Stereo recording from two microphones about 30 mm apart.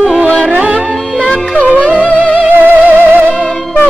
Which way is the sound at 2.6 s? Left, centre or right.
Right.